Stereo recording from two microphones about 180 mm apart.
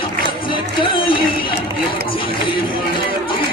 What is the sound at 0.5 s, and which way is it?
Music, 30° left (ahead or behind).